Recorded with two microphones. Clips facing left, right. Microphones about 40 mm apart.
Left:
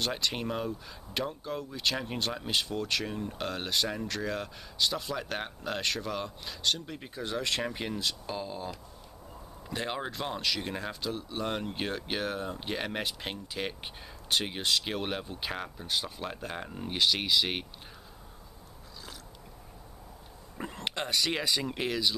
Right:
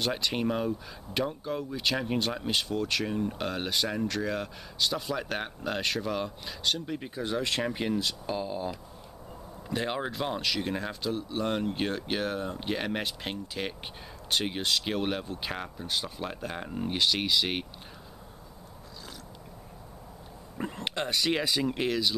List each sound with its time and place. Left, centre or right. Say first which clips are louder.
0.0 s speech: right 3 dB; centre
20.5 s speech: right 2 dB; centre